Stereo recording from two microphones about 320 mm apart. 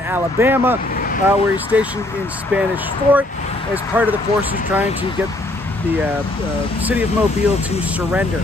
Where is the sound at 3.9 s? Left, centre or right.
Centre.